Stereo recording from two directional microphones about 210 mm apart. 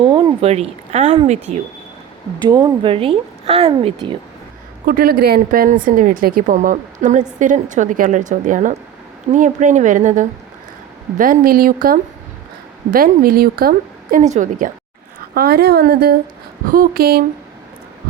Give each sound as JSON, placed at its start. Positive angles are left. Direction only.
{"t": 0.4, "sound": "a woman's voice", "side_deg": -30}
{"t": 2.5, "sound": "speech", "side_deg": -15}
{"t": 4.9, "sound": "a woman's voice", "side_deg": -45}
{"t": 15.4, "sound": "a woman's voice", "side_deg": -45}